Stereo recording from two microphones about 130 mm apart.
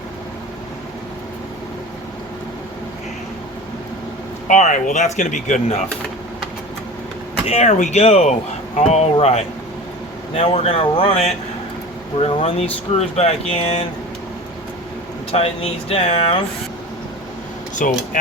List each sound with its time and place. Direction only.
4.4 s speech: 75° left (ahead or behind); by 5.8 s 60° left (ahead or behind)
7.4 s speech: 60° left (ahead or behind)
15.3 s speech: 50° left (ahead or behind)
17.8 s speech: 90° left